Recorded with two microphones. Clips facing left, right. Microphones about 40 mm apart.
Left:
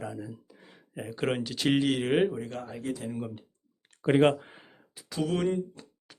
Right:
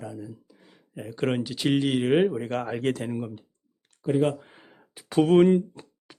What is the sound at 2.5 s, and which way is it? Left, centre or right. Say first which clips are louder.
Speech: right 8 dB; right.